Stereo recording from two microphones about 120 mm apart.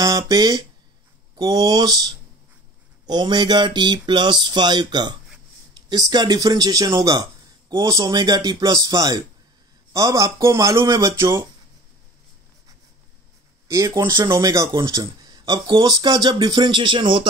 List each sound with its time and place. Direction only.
0.0 s speech: 30° right (ahead or behind)
13.7 s speech: 30° right (ahead or behind)